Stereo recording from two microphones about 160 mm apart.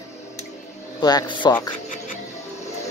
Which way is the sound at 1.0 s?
25° left (ahead or behind).